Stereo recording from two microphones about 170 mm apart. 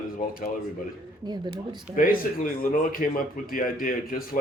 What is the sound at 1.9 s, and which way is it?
Speech, 55° left (ahead or behind).